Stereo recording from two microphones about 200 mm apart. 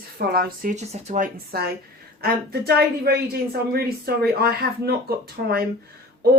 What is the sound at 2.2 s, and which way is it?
Speech, 50° right (ahead or behind).